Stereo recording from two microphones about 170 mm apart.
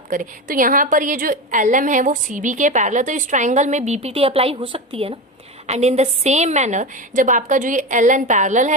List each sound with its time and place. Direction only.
0.1 s a woman's voice: 50° right (ahead or behind)